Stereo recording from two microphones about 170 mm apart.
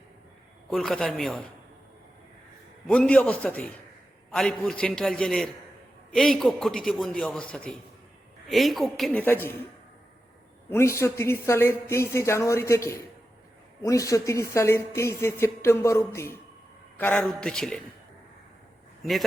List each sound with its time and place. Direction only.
0.7 s a man's voice: centre (ahead or behind)
2.8 s a man's voice: 5° left (ahead or behind)
10.7 s a man's voice: 15° left (ahead or behind)